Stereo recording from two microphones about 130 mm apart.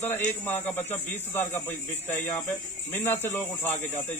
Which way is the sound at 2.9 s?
20° left (ahead or behind).